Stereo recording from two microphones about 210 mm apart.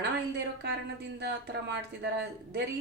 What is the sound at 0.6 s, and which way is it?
Speech, 50° right (ahead or behind).